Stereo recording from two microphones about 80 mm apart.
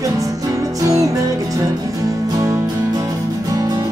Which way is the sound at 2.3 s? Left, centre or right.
Right.